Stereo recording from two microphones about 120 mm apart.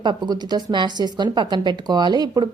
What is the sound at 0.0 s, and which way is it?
A woman's voice, 40° right (ahead or behind).